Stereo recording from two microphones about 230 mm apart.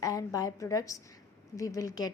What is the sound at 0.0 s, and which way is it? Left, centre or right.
A woman's voice, centre.